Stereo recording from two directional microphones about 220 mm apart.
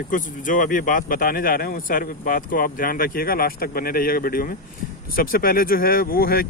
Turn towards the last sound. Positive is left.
turn(degrees=45)  # may be behind; listen again after turning